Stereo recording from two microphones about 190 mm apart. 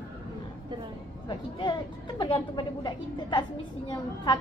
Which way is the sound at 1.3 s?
25° left (ahead or behind).